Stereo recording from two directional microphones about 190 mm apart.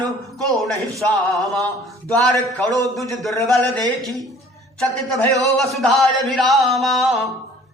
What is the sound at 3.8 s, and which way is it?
Speech, 20° right (ahead or behind).